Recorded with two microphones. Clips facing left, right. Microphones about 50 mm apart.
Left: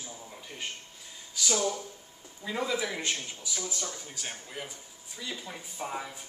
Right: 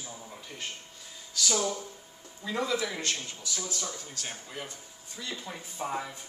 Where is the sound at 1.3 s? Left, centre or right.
Centre.